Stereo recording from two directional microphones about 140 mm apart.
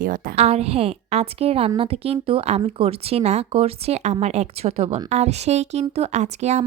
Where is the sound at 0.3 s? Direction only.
50° right (ahead or behind).